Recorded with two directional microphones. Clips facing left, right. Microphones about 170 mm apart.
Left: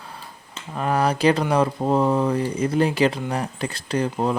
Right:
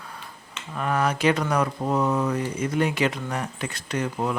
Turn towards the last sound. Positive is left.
turn(degrees=30)  # may be behind; listen again after turning